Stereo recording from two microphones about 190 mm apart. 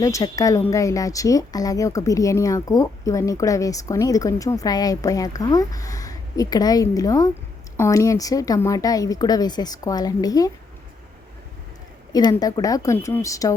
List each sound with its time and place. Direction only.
0.0 s speech: 15° left (ahead or behind)
12.1 s speech: 20° left (ahead or behind)